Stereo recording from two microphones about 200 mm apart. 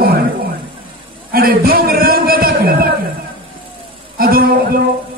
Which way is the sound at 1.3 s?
50° right (ahead or behind).